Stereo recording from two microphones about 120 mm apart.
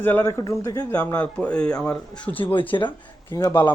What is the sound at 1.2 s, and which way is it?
Speech, 10° left (ahead or behind).